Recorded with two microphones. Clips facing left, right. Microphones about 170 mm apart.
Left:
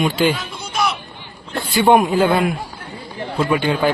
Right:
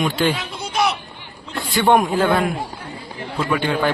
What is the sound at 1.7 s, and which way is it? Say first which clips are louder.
Speech: left 2 dB; 5° left (ahead or behind).